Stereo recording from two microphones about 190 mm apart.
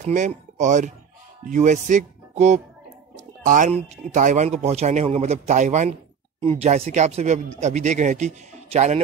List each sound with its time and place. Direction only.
0.0 s speech: 40° right (ahead or behind)